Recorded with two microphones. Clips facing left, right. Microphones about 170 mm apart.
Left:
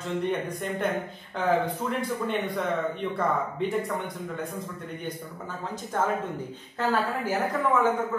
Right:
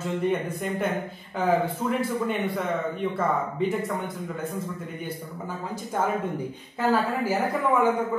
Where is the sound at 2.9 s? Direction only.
5° right (ahead or behind).